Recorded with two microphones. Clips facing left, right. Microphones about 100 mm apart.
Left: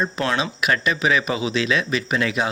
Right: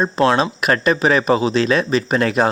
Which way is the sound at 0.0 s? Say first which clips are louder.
Right 7 dB; 35° right (ahead or behind).